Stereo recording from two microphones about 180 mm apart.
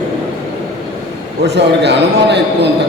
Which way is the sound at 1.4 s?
70° right (ahead or behind).